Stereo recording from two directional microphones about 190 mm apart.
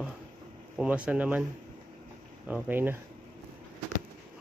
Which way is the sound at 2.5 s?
10° right (ahead or behind).